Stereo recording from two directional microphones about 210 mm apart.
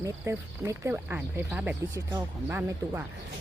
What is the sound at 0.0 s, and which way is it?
Speech, 15° right (ahead or behind).